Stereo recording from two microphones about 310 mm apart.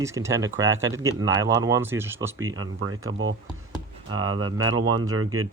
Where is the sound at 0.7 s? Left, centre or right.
Right.